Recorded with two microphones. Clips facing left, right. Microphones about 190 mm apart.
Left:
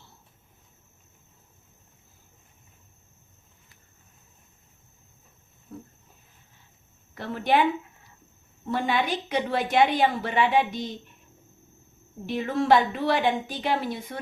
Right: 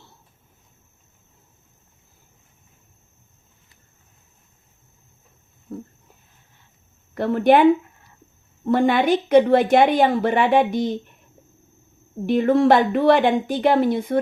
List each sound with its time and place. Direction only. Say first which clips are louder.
7.1 s speech: right 9 dB; 55° right (ahead or behind)
8.7 s a woman's voice: right 9 dB; 55° right (ahead or behind)
12.2 s speech: right 10 dB; 55° right (ahead or behind)